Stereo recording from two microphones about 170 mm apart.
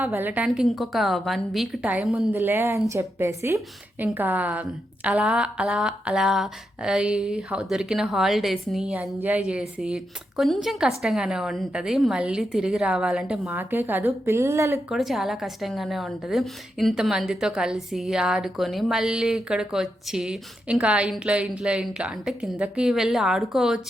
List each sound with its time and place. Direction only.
0.0 s a woman's voice: 10° right (ahead or behind)
2.3 s a woman's voice: 15° right (ahead or behind)
14.8 s a woman's voice: centre (ahead or behind)